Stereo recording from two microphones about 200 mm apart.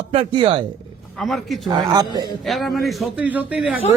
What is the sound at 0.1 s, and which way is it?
Speech, 30° right (ahead or behind).